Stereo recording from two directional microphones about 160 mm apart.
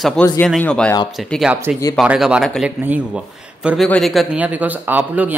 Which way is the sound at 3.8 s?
5° left (ahead or behind).